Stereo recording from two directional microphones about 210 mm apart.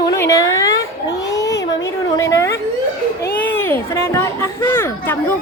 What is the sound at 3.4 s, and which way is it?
Speech, 10° left (ahead or behind).